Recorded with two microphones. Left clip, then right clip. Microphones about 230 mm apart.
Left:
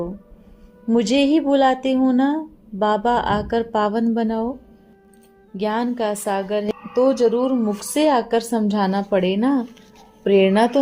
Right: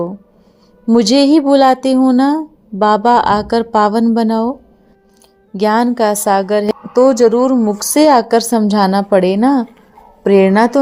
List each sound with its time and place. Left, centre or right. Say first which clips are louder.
0.9 s a woman's voice: right 7 dB; right
5.5 s a woman's voice: right 10 dB; right